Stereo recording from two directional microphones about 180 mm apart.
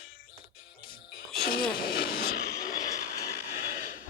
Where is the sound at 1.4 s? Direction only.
55° left (ahead or behind).